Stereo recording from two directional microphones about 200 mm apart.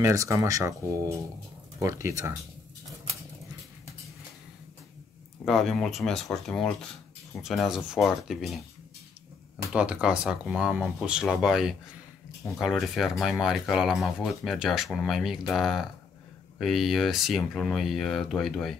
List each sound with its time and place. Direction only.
0.0 s speech: 15° right (ahead or behind)
5.4 s speech: centre (ahead or behind)
9.7 s speech: 5° right (ahead or behind)